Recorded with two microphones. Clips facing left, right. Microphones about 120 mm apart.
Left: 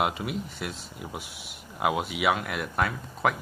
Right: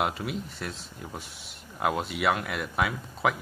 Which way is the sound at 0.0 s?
Centre (ahead or behind).